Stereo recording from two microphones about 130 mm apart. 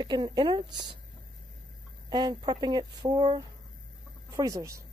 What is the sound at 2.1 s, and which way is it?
Speech, 35° right (ahead or behind).